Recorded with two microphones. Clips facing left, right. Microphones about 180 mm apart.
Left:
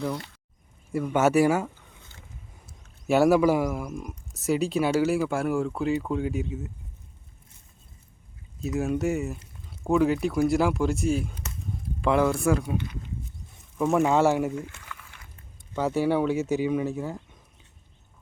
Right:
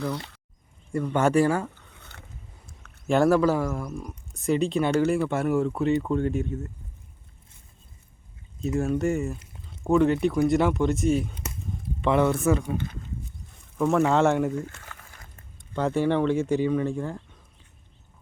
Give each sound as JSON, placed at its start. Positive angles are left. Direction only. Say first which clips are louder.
{"t": 0.9, "sound": "speech", "louder": "even", "side_deg": 5}
{"t": 1.9, "sound": "a sound", "louder": "right 3 dB", "side_deg": -65}
{"t": 3.1, "sound": "speech", "louder": "left 1 dB", "side_deg": 10}
{"t": 8.6, "sound": "speech", "louder": "right 1 dB", "side_deg": 5}
{"t": 12.7, "sound": "speech", "louder": "even", "side_deg": -50}
{"t": 13.7, "sound": "speech", "louder": "even", "side_deg": 10}
{"t": 14.8, "sound": "a sound", "louder": "left 1 dB", "side_deg": -40}
{"t": 15.7, "sound": "speech", "louder": "even", "side_deg": 5}